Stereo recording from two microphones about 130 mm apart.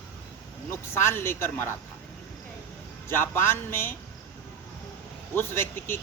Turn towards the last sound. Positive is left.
turn(degrees=15)  # may be behind; listen again after turning